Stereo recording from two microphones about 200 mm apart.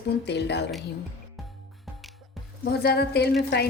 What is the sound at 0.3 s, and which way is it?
Speech, 60° left (ahead or behind).